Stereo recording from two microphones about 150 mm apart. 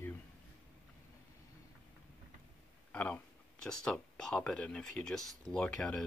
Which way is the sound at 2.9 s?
10° left (ahead or behind).